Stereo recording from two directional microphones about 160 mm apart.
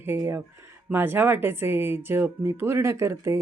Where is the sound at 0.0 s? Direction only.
15° right (ahead or behind).